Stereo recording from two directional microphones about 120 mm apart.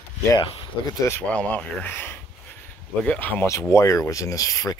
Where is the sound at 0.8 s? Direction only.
30° left (ahead or behind).